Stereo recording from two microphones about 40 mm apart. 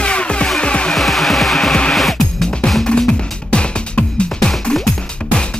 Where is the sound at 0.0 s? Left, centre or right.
Left.